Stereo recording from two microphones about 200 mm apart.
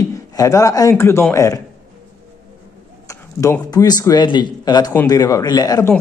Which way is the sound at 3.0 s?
15° left (ahead or behind).